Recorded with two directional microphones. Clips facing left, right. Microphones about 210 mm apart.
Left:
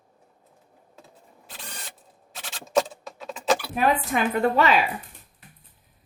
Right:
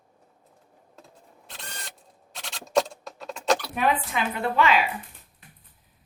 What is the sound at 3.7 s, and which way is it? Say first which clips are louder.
A woman's voice: left 3 dB; 45° left (ahead or behind).